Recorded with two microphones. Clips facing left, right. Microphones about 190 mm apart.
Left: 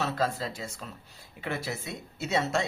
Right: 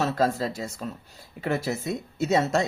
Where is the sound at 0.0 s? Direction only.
40° right (ahead or behind).